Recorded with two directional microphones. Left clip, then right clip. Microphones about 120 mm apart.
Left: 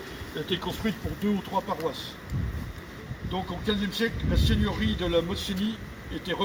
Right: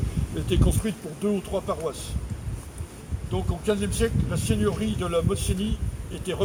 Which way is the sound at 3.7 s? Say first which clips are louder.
Right 4 dB; 45° right (ahead or behind).